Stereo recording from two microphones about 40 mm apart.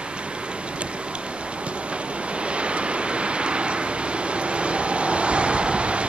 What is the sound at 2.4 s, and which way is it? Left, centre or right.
Waves, right.